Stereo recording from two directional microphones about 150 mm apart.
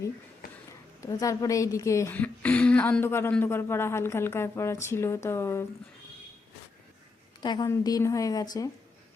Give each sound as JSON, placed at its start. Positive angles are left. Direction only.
{"t": 1.0, "sound": "a woman's voice", "side_deg": 20}
{"t": 7.4, "sound": "a woman's voice", "side_deg": 30}